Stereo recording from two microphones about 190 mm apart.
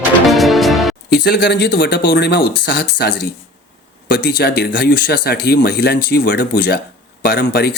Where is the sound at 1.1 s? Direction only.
60° left (ahead or behind).